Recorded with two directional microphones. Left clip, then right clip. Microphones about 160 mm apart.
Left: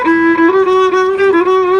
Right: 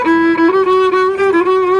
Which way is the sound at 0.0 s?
35° left (ahead or behind).